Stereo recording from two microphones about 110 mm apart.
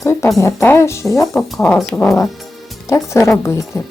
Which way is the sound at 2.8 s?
30° left (ahead or behind).